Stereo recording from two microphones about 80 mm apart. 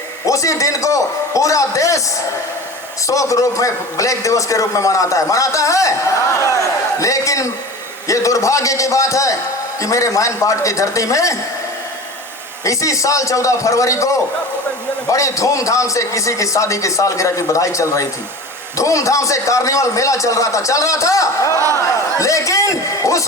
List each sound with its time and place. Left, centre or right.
0.3 s a man's voice: left
3.1 s a man's voice: left
12.6 s a man's voice: left
21.5 s speech: right
22.2 s a man's voice: left